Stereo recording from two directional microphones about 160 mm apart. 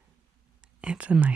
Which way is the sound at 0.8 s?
5° right (ahead or behind).